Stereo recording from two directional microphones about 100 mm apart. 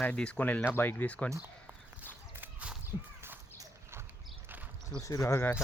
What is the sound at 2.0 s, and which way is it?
Walk, 20° right (ahead or behind).